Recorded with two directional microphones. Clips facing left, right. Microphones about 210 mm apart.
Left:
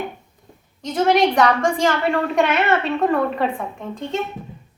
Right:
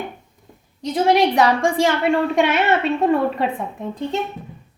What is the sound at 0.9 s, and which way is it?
A woman's voice, 30° right (ahead or behind).